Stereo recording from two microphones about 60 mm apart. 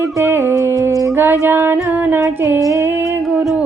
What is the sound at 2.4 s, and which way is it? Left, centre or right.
Music, right.